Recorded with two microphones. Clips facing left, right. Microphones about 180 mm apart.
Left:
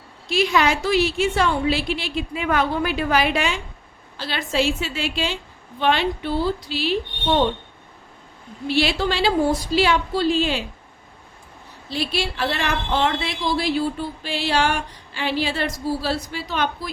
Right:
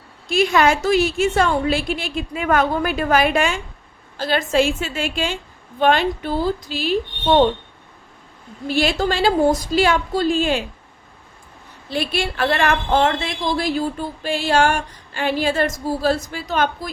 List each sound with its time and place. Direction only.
0.3 s a woman's voice: 50° right (ahead or behind)
8.6 s a woman's voice: 45° right (ahead or behind)
11.9 s a woman's voice: 55° right (ahead or behind)